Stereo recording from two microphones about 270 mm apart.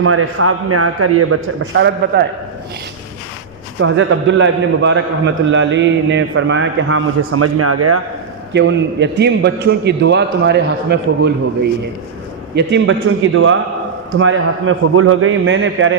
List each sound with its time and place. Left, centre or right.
0.0 s a man's voice: right
2.0 s a man's voice: right
3.8 s a man's voice: right
8.5 s a man's voice: right
12.5 s a man's voice: right